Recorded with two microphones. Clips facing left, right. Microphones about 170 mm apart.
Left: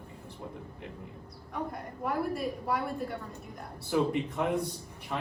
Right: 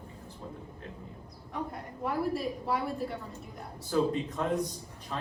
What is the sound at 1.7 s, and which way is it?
A woman's voice, centre (ahead or behind).